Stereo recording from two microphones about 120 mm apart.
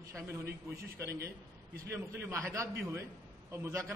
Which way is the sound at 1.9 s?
20° right (ahead or behind).